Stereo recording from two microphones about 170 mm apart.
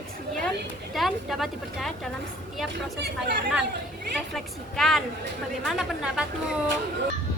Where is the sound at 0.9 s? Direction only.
Centre (ahead or behind).